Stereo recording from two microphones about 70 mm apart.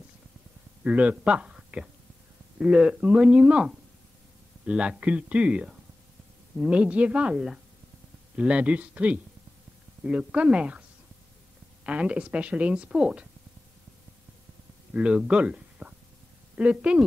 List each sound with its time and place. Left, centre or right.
0.8 s a woman's voice: centre
11.8 s a woman's voice: centre
15.0 s a woman's voice: centre